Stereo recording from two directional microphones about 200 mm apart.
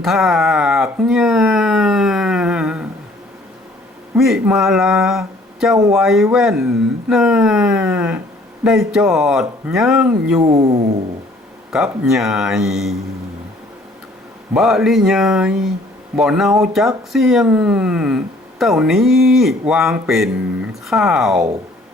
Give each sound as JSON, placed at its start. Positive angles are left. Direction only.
{"t": 0.0, "sound": "speech", "side_deg": 0}
{"t": 4.1, "sound": "speech", "side_deg": -5}
{"t": 10.4, "sound": "a sound", "side_deg": -30}
{"t": 11.7, "sound": "speech", "side_deg": -5}
{"t": 14.5, "sound": "speech", "side_deg": 0}